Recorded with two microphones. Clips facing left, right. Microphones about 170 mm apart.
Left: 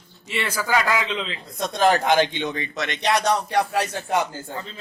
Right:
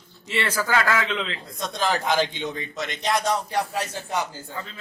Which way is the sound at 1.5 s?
60° left (ahead or behind).